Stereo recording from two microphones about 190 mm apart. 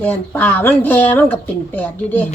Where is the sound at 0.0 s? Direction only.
10° left (ahead or behind).